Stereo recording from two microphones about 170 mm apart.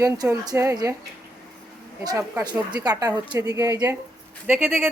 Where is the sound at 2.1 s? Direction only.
20° right (ahead or behind).